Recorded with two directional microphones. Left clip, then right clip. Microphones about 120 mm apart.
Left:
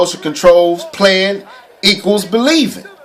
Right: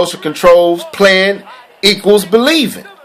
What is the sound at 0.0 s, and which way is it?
Speech, 40° right (ahead or behind).